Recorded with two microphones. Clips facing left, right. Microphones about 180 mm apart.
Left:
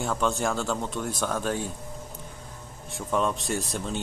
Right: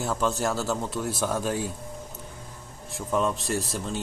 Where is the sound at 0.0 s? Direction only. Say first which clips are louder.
Even; 5° right (ahead or behind).